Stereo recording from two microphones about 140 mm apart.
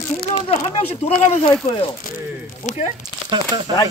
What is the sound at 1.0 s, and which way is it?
Speech, 50° left (ahead or behind).